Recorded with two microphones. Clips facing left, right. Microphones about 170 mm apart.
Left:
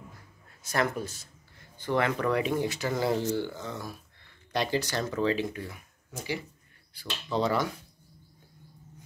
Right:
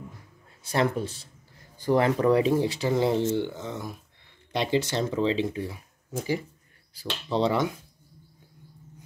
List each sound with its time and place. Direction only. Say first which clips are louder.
0.7 s speech: right 4 dB; 30° right (ahead or behind)
7.0 s speech: right 3 dB; 30° right (ahead or behind)